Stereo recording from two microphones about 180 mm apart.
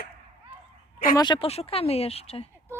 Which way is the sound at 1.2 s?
30° left (ahead or behind).